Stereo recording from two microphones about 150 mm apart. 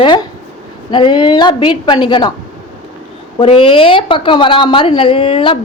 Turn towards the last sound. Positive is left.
turn(degrees=35)  # may be behind; listen again after turning